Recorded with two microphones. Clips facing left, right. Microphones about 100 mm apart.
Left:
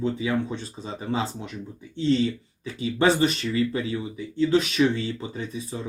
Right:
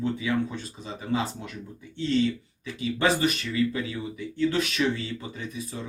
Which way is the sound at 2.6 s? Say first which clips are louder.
Left 3 dB; 30° left (ahead or behind).